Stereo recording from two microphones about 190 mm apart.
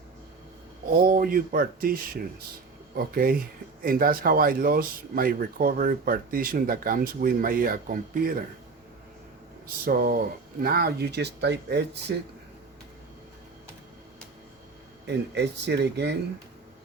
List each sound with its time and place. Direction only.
1.0 s speech: 50° right (ahead or behind)
9.8 s speech: 50° right (ahead or behind)
15.0 s speech: 65° right (ahead or behind)